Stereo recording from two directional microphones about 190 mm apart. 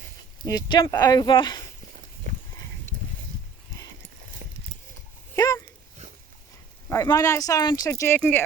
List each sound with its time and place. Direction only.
0.4 s speech: 20° left (ahead or behind)
4.4 s a sound: 40° right (ahead or behind)
5.4 s dog: 15° left (ahead or behind)
6.9 s speech: 15° left (ahead or behind)